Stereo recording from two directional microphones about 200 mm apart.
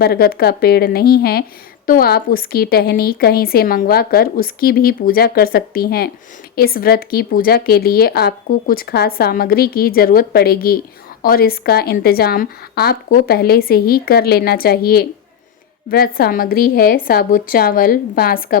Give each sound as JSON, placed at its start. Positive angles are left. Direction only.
{"t": 0.0, "sound": "a woman's voice", "side_deg": 50}